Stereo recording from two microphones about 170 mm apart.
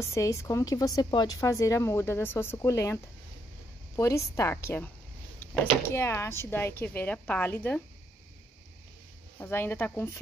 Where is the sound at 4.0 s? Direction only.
15° left (ahead or behind).